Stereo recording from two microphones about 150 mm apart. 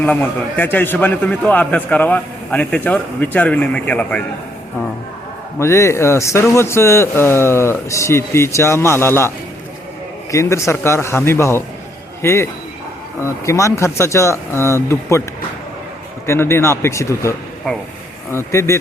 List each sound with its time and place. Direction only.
0.0 s a man's voice: 10° left (ahead or behind)
5.5 s a man's voice: 20° left (ahead or behind)
10.3 s a man's voice: 20° left (ahead or behind)
16.2 s a man's voice: 15° left (ahead or behind)
17.7 s speech: 5° left (ahead or behind)
18.3 s a man's voice: 15° left (ahead or behind)